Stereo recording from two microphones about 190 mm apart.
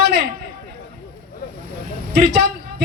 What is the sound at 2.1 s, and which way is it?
Speech, 60° right (ahead or behind).